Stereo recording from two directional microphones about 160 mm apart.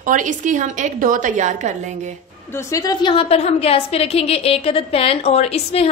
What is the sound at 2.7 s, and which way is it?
A woman's voice, 25° left (ahead or behind).